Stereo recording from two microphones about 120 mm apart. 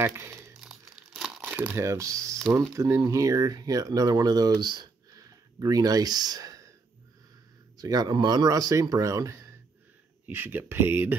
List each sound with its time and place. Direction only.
0.0 s speech: 20° right (ahead or behind)
0.6 s crumpling: 5° right (ahead or behind)
1.8 s speech: 25° right (ahead or behind)
7.7 s speech: 30° right (ahead or behind)